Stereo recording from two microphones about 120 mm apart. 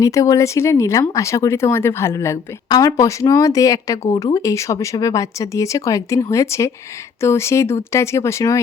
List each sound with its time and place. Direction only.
0.0 s speech: 30° left (ahead or behind)
2.6 s speech: 30° left (ahead or behind)